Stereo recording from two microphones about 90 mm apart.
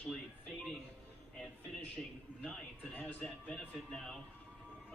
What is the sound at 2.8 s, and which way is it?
Speech, 15° left (ahead or behind).